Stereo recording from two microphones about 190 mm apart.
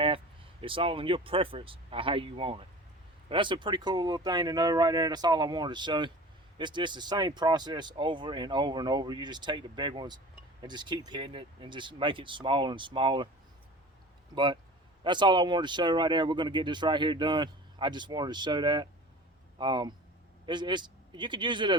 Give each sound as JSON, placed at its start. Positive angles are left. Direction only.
{"t": 0.6, "sound": "speech", "side_deg": -30}
{"t": 14.3, "sound": "speech", "side_deg": -25}